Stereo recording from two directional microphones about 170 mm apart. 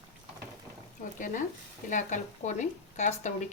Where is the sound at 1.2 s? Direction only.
50° left (ahead or behind).